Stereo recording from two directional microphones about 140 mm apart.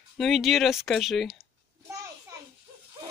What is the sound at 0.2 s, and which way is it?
Speech, centre (ahead or behind).